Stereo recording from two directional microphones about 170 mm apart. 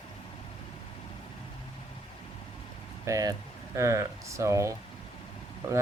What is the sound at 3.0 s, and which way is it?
Speech, 20° right (ahead or behind).